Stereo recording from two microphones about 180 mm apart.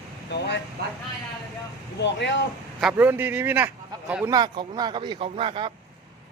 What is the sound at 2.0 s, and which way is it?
Speech, 80° left.